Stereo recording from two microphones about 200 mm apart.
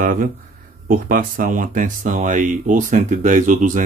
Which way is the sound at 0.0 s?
45° right (ahead or behind).